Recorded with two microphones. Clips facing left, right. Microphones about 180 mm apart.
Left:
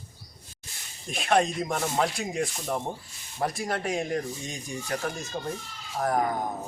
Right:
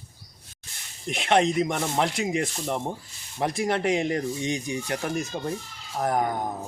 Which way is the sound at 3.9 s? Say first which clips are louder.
Right 4 dB; 80° right.